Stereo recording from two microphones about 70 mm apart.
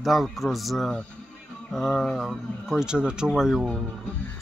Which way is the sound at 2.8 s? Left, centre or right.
Centre.